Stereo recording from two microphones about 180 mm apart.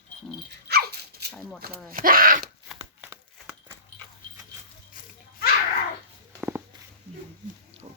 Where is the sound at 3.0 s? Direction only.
15° right (ahead or behind).